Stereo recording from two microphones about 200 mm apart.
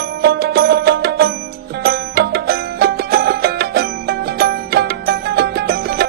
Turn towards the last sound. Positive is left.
turn(degrees=-50)  # may be behind; listen again after turning